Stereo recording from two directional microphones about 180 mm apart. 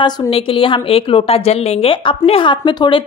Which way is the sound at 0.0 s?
25° left (ahead or behind).